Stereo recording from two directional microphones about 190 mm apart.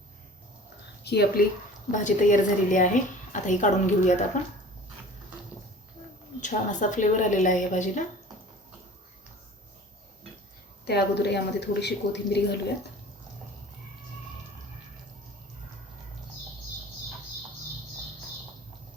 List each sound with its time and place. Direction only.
1.0 s a woman's voice: 55° left (ahead or behind)
1.9 s a woman's voice: 40° left (ahead or behind)
6.4 s a woman's voice: 40° left (ahead or behind)
10.8 s a woman's voice: 60° left (ahead or behind)